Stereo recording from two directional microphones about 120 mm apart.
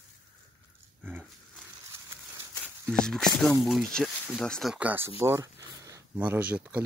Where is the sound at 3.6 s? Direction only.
Centre (ahead or behind).